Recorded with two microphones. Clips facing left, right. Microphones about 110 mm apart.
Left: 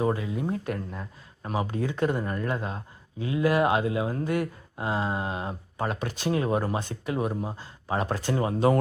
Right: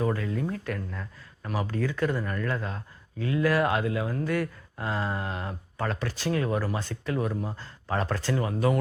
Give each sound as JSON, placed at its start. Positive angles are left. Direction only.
{"t": 0.0, "sound": "speech", "side_deg": 20}
{"t": 8.4, "sound": "speech", "side_deg": 25}